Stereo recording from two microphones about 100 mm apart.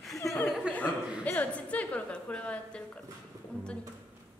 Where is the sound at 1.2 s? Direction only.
15° left (ahead or behind).